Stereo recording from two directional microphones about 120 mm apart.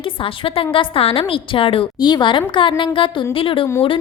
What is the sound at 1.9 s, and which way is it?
A woman's voice, 35° left (ahead or behind).